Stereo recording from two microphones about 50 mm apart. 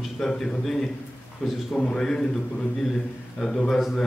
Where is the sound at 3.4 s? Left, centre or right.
Centre.